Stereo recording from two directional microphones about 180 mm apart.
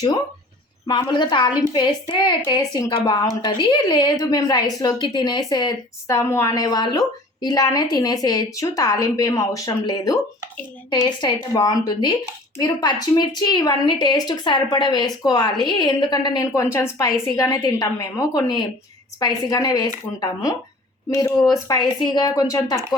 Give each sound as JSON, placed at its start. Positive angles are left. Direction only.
{"t": 0.9, "sound": "a woman's voice", "side_deg": 25}
{"t": 21.1, "sound": "a woman's voice", "side_deg": 15}